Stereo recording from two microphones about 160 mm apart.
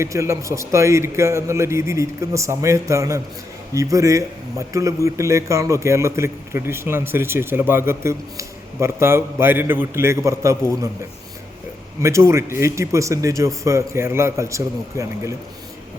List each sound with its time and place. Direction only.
0.0 s a man's voice: 20° right (ahead or behind)
12.0 s a man's voice: 15° right (ahead or behind)